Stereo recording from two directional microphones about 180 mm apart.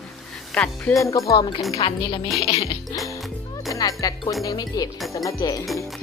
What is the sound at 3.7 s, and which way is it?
Speech, 20° left (ahead or behind).